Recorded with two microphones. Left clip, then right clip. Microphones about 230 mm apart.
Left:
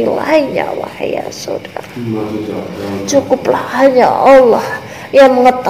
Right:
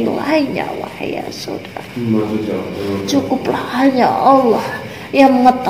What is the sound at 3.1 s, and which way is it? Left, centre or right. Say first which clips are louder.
Speech: left 7 dB; left.